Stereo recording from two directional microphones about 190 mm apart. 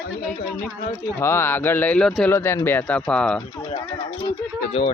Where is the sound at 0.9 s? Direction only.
15° left (ahead or behind).